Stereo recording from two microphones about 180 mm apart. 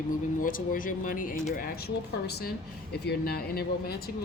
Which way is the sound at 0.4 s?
50° left (ahead or behind).